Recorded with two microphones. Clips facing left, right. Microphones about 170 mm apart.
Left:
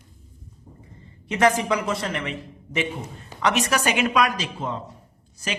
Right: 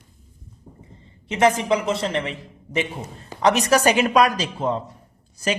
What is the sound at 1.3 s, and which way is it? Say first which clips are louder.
A man's voice: right 2 dB; 25° right (ahead or behind).